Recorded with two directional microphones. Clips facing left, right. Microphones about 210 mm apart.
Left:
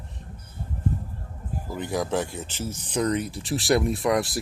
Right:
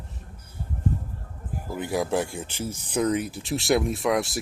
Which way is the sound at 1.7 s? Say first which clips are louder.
Right 1 dB; 10° right (ahead or behind).